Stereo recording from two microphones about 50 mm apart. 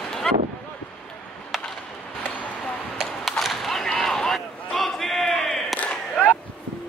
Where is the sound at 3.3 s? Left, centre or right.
Centre.